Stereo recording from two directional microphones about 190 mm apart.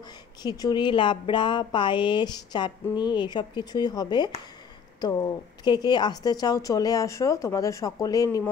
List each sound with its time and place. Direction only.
0.4 s speech: 20° left (ahead or behind)